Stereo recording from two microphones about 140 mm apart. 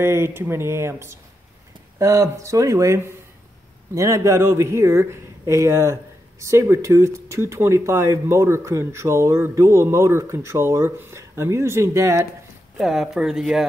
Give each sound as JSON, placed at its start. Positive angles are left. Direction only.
{"t": 0.0, "sound": "speech", "side_deg": -15}
{"t": 12.7, "sound": "speech", "side_deg": 0}